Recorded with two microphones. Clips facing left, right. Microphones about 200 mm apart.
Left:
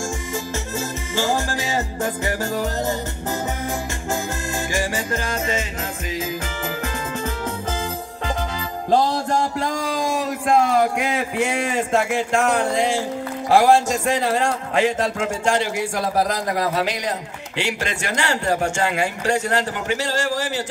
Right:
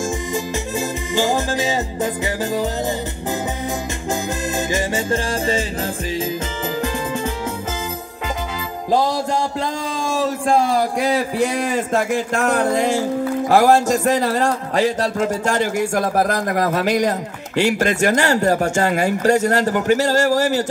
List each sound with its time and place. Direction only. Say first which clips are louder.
0.7 s music: right 4 dB; 15° right (ahead or behind)
4.7 s music: right 2 dB; 25° right (ahead or behind)
10.1 s a sound: right 3 dB; 30° right (ahead or behind)
13.5 s a man's voice: right 1 dB; 40° right (ahead or behind)